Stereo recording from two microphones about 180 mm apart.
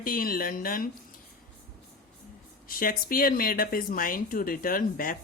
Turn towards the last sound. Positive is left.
turn(degrees=50)  # may be behind; listen again after turning